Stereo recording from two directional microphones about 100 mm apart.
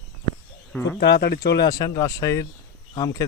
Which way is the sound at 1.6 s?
40° left (ahead or behind).